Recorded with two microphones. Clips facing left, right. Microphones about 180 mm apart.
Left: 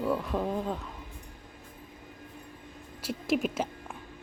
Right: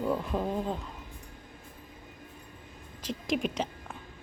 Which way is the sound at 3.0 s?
10° left (ahead or behind).